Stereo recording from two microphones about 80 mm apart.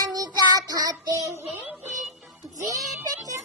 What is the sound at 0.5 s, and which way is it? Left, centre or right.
Child singing, right.